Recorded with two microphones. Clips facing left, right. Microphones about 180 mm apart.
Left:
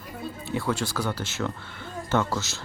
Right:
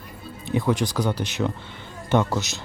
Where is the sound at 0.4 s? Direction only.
15° right (ahead or behind).